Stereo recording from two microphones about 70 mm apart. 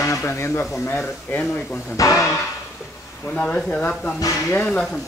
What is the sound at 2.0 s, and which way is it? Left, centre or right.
Speech, left.